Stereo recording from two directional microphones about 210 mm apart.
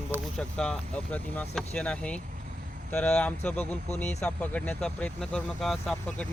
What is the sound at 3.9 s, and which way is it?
Speech, 35° left (ahead or behind).